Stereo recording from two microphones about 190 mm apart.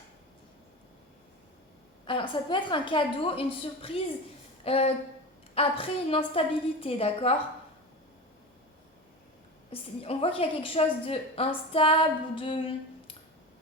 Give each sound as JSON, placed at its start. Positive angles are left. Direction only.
{"t": 2.0, "sound": "a woman's voice", "side_deg": 25}
{"t": 10.0, "sound": "a woman's voice", "side_deg": 30}